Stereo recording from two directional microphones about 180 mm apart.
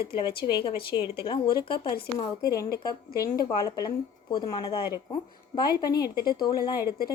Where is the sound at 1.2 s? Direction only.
25° left (ahead or behind).